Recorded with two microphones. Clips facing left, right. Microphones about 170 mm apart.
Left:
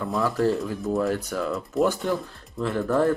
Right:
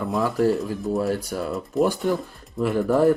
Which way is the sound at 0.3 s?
15° right (ahead or behind).